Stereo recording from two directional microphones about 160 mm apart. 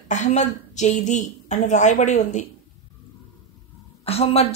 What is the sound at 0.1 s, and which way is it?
A woman's voice, 50° left (ahead or behind).